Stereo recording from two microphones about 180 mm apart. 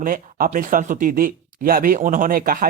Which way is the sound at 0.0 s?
50° right (ahead or behind).